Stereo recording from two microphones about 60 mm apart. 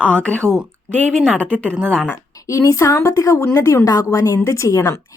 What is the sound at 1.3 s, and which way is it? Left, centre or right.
Speech, centre.